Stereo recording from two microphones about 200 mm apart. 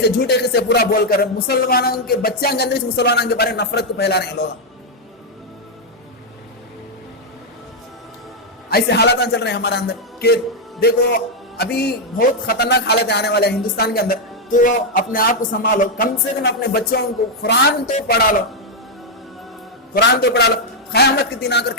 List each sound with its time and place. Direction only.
0.0 s a man's voice: 55° left (ahead or behind)
8.7 s a man's voice: 55° left (ahead or behind)
19.9 s a man's voice: 55° left (ahead or behind)